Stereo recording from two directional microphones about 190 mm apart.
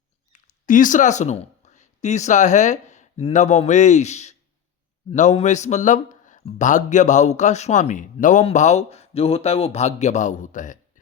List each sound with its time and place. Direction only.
0.3 s speech: 40° left (ahead or behind)